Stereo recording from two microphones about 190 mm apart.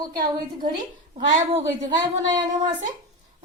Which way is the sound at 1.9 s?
25° right (ahead or behind).